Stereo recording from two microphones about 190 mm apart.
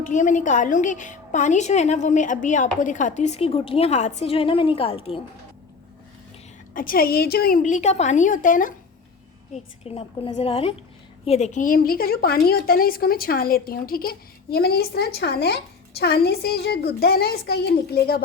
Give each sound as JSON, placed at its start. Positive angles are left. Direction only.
{"t": 0.0, "sound": "a woman's voice", "side_deg": 40}
{"t": 6.7, "sound": "a woman's voice", "side_deg": 50}
{"t": 9.8, "sound": "a woman's voice", "side_deg": 30}